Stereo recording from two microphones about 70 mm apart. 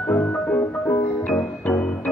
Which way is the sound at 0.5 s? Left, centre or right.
Left.